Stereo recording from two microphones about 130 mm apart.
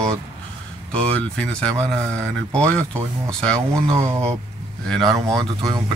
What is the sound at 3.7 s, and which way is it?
Speech, 25° right (ahead or behind).